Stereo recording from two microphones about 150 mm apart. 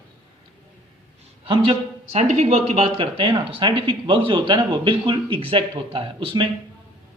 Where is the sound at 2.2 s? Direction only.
50° right (ahead or behind).